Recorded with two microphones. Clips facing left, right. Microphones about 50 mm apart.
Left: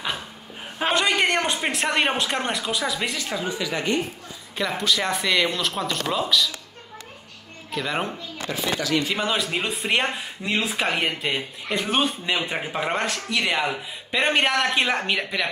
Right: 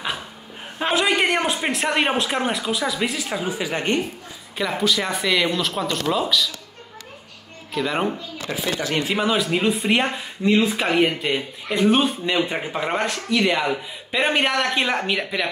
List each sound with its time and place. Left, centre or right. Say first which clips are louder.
0.7 s speech: right 1 dB; centre
3.3 s speech: right 1 dB; centre
3.6 s a man's voice: right 2 dB; right
4.6 s speech: right 2 dB; centre
7.7 s speech: right 4 dB; centre
8.5 s speech: right 2 dB; right
9.1 s speech: right 4 dB; centre